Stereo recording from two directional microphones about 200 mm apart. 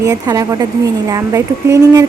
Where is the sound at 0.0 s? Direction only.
15° right (ahead or behind).